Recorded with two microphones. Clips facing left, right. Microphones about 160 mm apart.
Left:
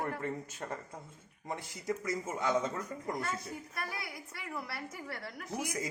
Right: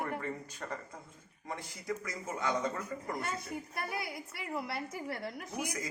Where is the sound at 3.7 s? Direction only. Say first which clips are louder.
Right 4 dB; 25° right (ahead or behind).